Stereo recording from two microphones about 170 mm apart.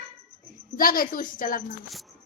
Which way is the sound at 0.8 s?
55° left (ahead or behind).